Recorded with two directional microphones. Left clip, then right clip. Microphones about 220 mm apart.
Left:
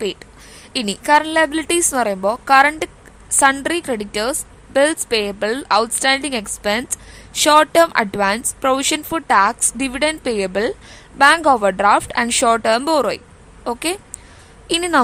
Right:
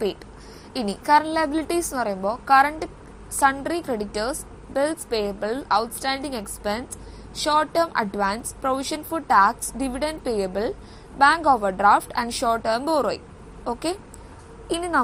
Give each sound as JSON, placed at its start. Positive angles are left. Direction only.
{"t": 0.8, "sound": "speech", "side_deg": 45}